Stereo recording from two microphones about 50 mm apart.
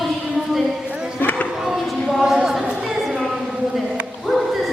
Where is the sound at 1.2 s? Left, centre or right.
Left.